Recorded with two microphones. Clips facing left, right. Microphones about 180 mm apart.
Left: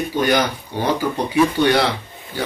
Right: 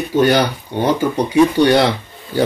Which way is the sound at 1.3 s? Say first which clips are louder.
Right 4 dB; 25° right (ahead or behind).